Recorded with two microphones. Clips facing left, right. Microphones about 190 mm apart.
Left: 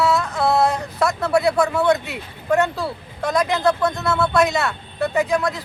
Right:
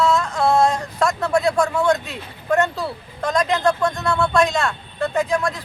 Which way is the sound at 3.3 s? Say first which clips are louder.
Even; 10° left (ahead or behind).